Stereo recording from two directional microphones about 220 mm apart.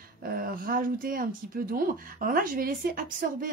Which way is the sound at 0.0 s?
40° right (ahead or behind).